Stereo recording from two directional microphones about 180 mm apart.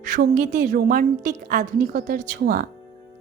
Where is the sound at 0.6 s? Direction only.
50° right (ahead or behind).